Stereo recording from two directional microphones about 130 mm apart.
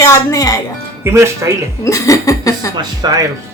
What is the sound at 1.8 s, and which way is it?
Speech, 25° left (ahead or behind).